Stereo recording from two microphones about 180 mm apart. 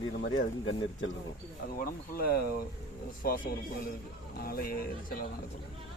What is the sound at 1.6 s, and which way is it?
Speech, 55° left (ahead or behind).